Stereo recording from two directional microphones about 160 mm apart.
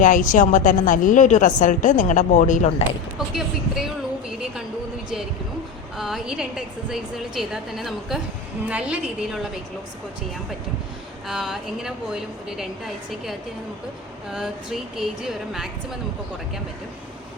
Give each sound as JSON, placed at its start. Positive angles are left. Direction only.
{"t": 0.0, "sound": "a woman's voice", "side_deg": 55}
{"t": 3.2, "sound": "a sound", "side_deg": 0}
{"t": 6.0, "sound": "a woman's voice", "side_deg": 0}
{"t": 11.3, "sound": "a woman's voice", "side_deg": 0}
{"t": 14.3, "sound": "a woman's voice", "side_deg": -5}